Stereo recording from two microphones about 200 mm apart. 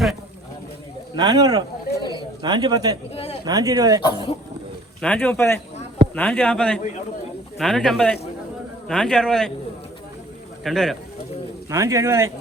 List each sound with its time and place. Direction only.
1.1 s a man's voice: 20° right (ahead or behind)
2.0 s a sound: 20° left (ahead or behind)
2.4 s a man's voice: 20° right (ahead or behind)
4.0 s speech: 25° left (ahead or behind)
4.9 s a man's voice: 5° left (ahead or behind)
10.6 s speech: centre (ahead or behind)
11.7 s speech: 15° right (ahead or behind)